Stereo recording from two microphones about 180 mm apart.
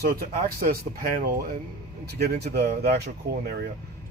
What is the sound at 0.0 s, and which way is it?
Speech, 55° right (ahead or behind).